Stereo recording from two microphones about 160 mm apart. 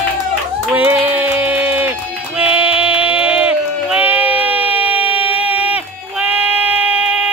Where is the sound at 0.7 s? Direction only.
10° right (ahead or behind).